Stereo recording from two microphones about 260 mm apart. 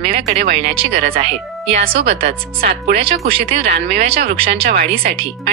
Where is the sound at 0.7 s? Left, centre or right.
Right.